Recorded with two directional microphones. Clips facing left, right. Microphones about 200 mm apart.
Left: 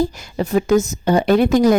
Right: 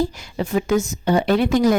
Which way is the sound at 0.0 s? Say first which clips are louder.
Left 3 dB; 45° left (ahead or behind).